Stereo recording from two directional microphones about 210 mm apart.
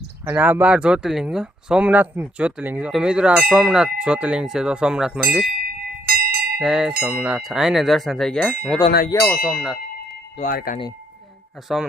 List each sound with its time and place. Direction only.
0.3 s speech: 10° right (ahead or behind)
6.1 s bell: 45° right (ahead or behind)
6.6 s speech: 5° right (ahead or behind)
10.5 s speech: 45° left (ahead or behind)
11.7 s speech: centre (ahead or behind)